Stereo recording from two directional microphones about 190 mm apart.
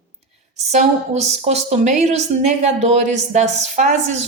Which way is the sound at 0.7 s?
35° right (ahead or behind).